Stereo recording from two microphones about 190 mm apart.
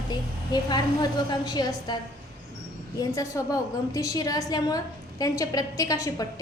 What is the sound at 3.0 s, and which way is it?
A woman's voice, 20° left (ahead or behind).